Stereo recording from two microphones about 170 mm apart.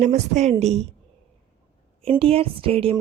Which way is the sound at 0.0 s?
40° right (ahead or behind).